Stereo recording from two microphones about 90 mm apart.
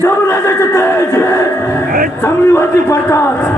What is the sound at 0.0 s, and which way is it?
A man's voice, 30° left (ahead or behind).